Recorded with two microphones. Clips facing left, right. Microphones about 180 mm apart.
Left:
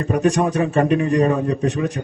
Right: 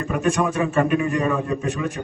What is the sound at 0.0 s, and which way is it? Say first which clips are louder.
A man's voice: left 4 dB; 35° left (ahead or behind).